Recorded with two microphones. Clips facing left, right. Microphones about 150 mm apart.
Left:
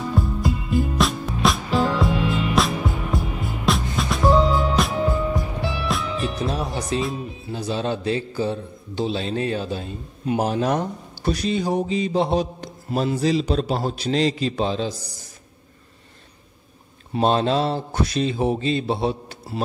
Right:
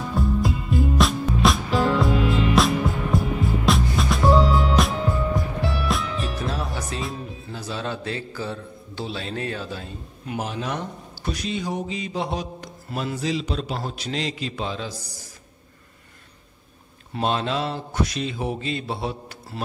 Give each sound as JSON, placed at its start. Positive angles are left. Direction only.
{"t": 0.1, "sound": "music", "side_deg": 0}
{"t": 6.2, "sound": "music", "side_deg": 20}
{"t": 7.0, "sound": "speech", "side_deg": 0}
{"t": 7.5, "sound": "a man's voice", "side_deg": 20}
{"t": 10.4, "sound": "a man's voice", "side_deg": 40}
{"t": 17.2, "sound": "a man's voice", "side_deg": 35}